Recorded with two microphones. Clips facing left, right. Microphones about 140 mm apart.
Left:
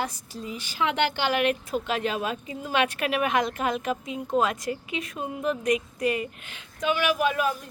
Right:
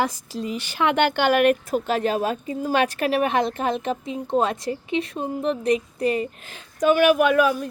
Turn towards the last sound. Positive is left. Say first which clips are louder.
# right 7 dB
turn(degrees=-75)  # may be behind; listen again after turning